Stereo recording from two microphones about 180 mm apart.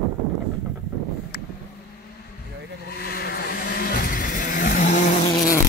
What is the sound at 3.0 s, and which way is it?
Vehicle, 60° left (ahead or behind).